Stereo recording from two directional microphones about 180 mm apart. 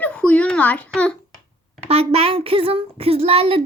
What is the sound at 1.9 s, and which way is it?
Speech, 35° right (ahead or behind).